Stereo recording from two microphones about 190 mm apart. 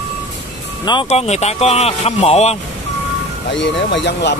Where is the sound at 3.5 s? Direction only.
70° left (ahead or behind).